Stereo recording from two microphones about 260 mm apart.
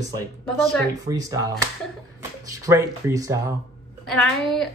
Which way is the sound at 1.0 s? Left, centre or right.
Centre.